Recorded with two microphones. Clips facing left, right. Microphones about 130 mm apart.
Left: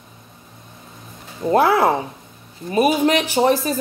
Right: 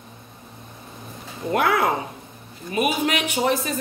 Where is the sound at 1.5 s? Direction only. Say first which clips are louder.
Left 5 dB; 30° left (ahead or behind).